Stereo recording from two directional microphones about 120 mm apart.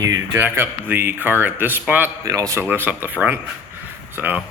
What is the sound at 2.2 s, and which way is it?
Speech, 30° right (ahead or behind).